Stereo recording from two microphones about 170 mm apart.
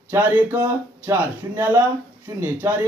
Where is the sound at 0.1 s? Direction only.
15° right (ahead or behind).